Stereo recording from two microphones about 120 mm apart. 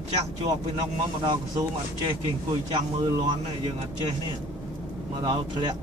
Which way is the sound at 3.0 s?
35° right (ahead or behind).